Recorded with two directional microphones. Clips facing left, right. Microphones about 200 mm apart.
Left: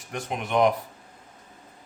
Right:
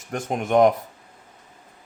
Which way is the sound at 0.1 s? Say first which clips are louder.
Right 6 dB; 45° right (ahead or behind).